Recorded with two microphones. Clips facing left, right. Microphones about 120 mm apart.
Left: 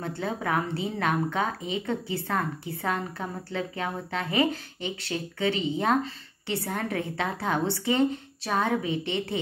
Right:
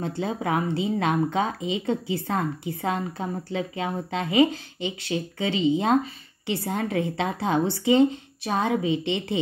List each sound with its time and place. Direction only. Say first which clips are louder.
0.0 s a woman's voice: right 3 dB; 20° right (ahead or behind)